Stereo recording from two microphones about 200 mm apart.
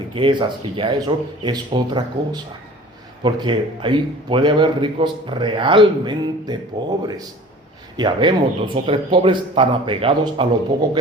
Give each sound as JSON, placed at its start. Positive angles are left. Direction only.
{"t": 0.1, "sound": "a man's voice", "side_deg": -25}
{"t": 7.9, "sound": "a man's voice", "side_deg": -20}